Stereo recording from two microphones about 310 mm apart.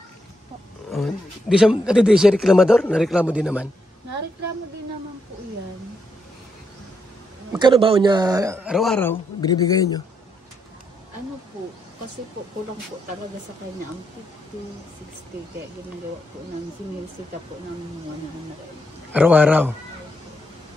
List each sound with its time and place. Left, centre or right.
0.8 s speech: centre
7.5 s speech: centre
19.1 s speech: centre